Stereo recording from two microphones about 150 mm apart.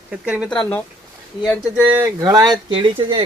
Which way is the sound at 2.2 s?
25° right (ahead or behind).